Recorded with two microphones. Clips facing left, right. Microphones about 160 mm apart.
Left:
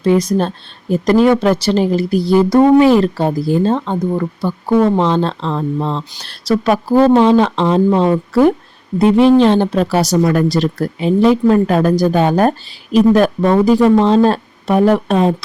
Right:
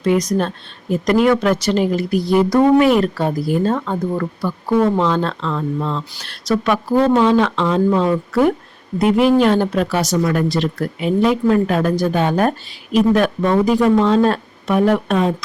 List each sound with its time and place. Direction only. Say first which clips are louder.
0.0 s a woman's voice: left 3 dB; 30° left (ahead or behind)
4.9 s speech: left 3 dB; 30° left (ahead or behind)